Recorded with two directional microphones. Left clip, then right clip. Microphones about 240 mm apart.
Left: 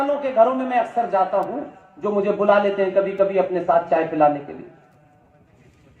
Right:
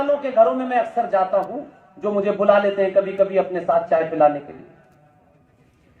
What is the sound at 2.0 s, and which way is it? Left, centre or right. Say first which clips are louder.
A man's voice: right 1 dB; right.